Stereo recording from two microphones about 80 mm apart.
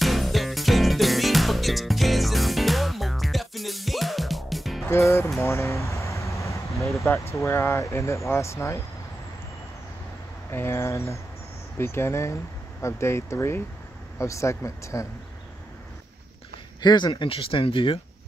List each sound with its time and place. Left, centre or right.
0.0 s music: centre
4.8 s music: left
5.4 s a sound: left
7.3 s speech: left
10.5 s speech: left
16.8 s speech: left